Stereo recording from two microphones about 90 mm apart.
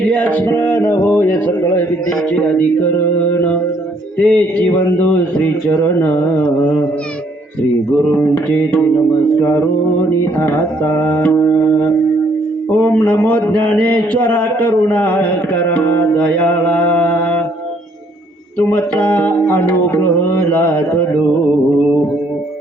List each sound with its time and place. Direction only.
0.1 s a sound: 20° left (ahead or behind)
4.2 s a man's voice: 15° left (ahead or behind)
8.1 s a man's voice: 20° left (ahead or behind)
10.8 s a man's voice: 20° left (ahead or behind)
13.1 s a man's voice: 20° left (ahead or behind)
18.8 s a man's voice: 15° left (ahead or behind)